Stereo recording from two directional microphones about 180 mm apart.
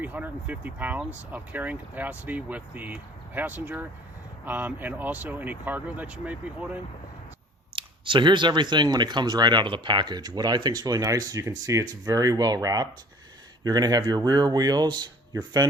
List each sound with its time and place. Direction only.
0.0 s speech: 10° right (ahead or behind)
7.8 s speech: 25° right (ahead or behind)